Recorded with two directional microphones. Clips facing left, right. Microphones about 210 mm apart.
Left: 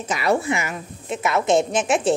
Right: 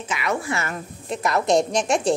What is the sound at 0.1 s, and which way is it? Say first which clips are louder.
Speech: left 5 dB; 35° left (ahead or behind).